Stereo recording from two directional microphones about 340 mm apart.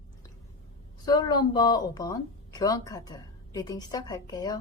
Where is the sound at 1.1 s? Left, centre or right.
Centre.